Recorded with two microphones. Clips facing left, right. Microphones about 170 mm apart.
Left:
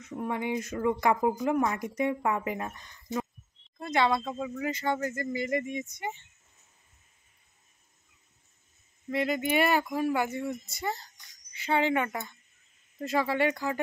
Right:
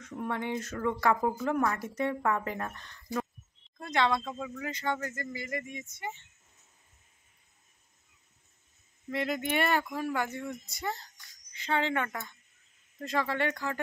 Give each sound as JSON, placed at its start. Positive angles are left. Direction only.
{"t": 0.0, "sound": "speech", "side_deg": 10}
{"t": 9.1, "sound": "speech", "side_deg": 0}